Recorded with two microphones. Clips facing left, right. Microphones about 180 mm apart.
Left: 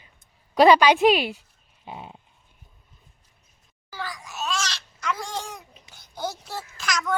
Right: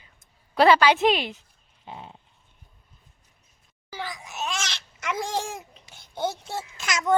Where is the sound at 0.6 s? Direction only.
15° left (ahead or behind).